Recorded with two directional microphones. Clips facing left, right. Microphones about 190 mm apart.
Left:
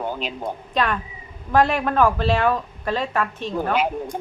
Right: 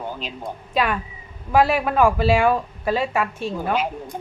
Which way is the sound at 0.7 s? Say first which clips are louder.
Right 2 dB; 10° right (ahead or behind).